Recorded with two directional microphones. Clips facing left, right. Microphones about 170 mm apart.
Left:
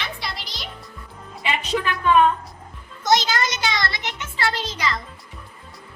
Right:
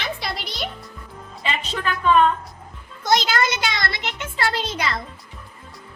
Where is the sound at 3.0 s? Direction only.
55° right (ahead or behind).